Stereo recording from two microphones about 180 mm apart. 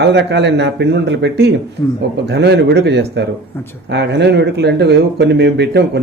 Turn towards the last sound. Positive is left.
turn(degrees=-70)  # may be behind; listen again after turning